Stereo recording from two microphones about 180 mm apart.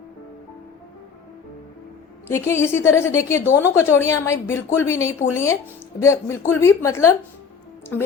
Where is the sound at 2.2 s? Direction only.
15° left (ahead or behind).